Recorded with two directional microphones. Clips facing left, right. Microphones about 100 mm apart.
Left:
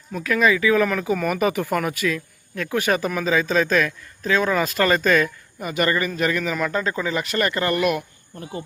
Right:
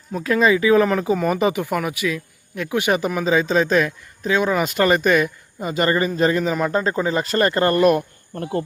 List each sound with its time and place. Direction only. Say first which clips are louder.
0.1 s speech: right 2 dB; 30° right (ahead or behind)
8.4 s speech: right 8 dB; 60° right (ahead or behind)